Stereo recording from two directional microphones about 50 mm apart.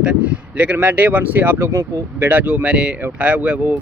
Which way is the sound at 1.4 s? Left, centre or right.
Right.